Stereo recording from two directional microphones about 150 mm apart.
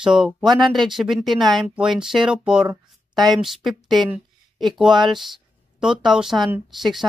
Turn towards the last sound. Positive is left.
turn(degrees=0)  # may be behind; listen again after turning